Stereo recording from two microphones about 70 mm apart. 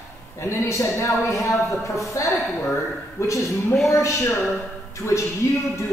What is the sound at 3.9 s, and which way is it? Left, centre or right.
Speech, left.